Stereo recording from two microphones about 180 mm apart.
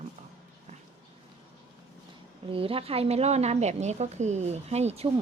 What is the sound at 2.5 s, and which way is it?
A woman's voice, 30° right (ahead or behind).